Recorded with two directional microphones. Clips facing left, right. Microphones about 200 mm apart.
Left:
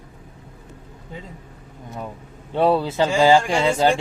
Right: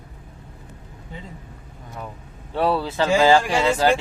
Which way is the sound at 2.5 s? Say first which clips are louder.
Left 3 dB; 20° left (ahead or behind).